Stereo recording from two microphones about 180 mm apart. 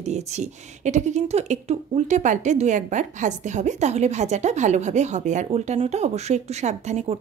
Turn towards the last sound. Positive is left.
turn(degrees=-40)  # may be behind; listen again after turning